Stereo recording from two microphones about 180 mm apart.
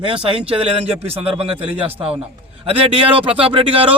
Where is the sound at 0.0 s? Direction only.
30° right (ahead or behind).